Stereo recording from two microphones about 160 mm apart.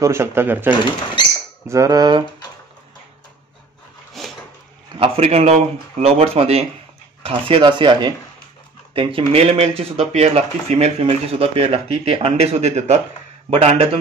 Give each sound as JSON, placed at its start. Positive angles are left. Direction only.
{"t": 0.0, "sound": "speech", "side_deg": -15}
{"t": 4.2, "sound": "a sound", "side_deg": 0}
{"t": 4.9, "sound": "speech", "side_deg": -35}